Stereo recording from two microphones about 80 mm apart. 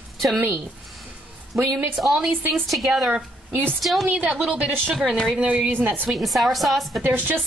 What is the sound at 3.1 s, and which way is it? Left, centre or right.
Speech, right.